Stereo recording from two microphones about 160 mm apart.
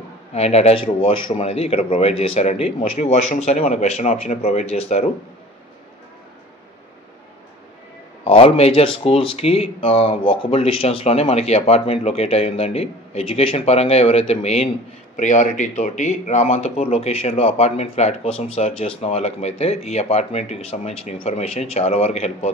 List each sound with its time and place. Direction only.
0.3 s speech: 40° left (ahead or behind)
8.2 s speech: 35° left (ahead or behind)